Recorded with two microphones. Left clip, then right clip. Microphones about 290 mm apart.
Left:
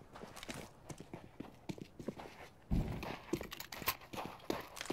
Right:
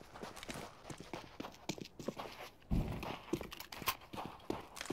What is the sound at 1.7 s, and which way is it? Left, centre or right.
Clip-clop, centre.